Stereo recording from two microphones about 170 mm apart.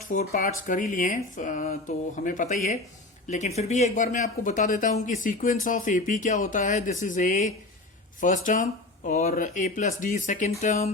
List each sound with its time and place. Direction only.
0.1 s speech: 50° left (ahead or behind)